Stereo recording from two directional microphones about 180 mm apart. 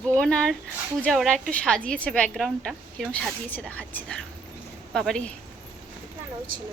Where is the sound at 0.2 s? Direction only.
5° left (ahead or behind).